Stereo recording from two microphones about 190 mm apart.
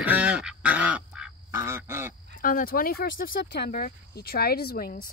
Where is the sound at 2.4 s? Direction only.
45° left (ahead or behind).